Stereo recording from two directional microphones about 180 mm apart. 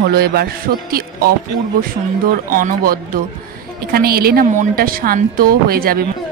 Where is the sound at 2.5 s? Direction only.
50° right (ahead or behind).